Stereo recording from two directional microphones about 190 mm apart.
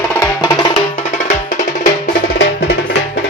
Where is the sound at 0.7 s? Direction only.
35° left (ahead or behind).